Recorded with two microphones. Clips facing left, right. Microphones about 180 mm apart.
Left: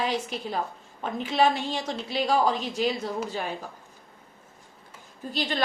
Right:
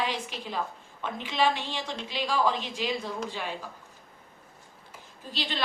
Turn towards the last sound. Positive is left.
turn(degrees=45)  # may be behind; listen again after turning